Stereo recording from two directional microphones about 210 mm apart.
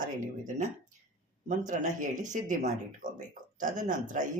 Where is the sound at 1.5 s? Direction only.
35° right (ahead or behind).